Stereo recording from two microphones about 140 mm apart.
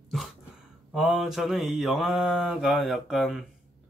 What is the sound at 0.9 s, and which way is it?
Mantra, 5° right (ahead or behind).